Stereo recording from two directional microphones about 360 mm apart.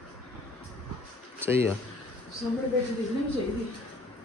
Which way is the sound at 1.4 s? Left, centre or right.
Centre.